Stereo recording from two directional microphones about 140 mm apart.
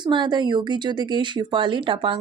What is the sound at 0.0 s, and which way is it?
A woman's voice, 30° right (ahead or behind).